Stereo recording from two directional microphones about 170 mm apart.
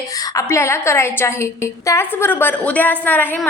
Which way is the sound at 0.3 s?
15° left (ahead or behind).